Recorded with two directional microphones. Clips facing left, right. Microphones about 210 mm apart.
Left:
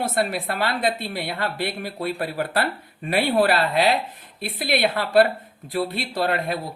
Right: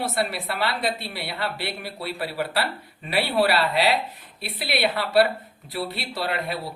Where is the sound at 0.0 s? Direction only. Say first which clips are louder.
Left 3 dB; 50° left (ahead or behind).